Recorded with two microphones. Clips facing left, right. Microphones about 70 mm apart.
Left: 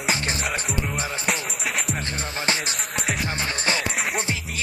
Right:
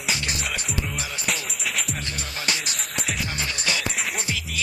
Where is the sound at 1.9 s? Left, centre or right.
Left.